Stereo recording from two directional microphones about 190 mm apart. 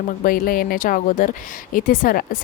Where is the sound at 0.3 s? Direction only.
50° left (ahead or behind).